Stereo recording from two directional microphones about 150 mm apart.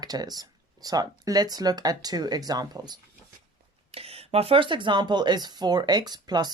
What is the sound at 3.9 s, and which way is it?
Speech, 40° right (ahead or behind).